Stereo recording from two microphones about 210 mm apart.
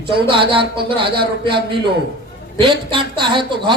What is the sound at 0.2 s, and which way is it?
A man's voice, 25° right (ahead or behind).